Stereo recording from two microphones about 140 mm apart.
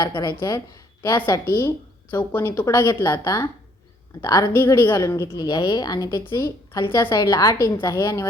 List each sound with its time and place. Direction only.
0.0 s a woman's voice: 30° left (ahead or behind)